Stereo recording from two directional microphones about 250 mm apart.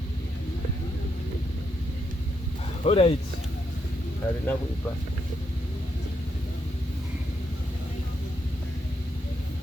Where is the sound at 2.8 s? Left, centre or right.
Left.